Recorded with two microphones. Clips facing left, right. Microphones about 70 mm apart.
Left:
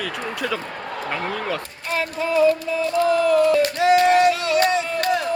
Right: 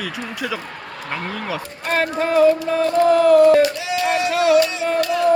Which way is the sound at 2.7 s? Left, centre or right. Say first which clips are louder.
Right 4 dB; right.